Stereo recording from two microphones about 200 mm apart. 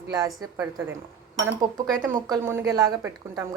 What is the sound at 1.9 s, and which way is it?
A woman's voice, 15° right (ahead or behind).